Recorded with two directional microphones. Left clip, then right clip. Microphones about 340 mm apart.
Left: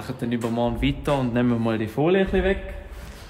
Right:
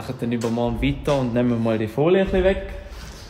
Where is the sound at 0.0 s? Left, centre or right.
Centre.